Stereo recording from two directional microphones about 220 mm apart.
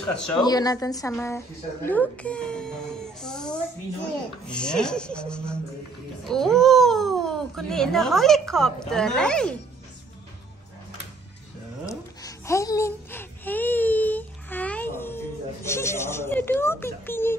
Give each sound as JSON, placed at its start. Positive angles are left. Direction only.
{"t": 0.1, "sound": "a child's voice", "side_deg": 5}
{"t": 0.4, "sound": "speech", "side_deg": 15}
{"t": 1.9, "sound": "a sound", "side_deg": 5}
{"t": 4.5, "sound": "a child's voice", "side_deg": 5}
{"t": 11.8, "sound": "baby cry", "side_deg": 15}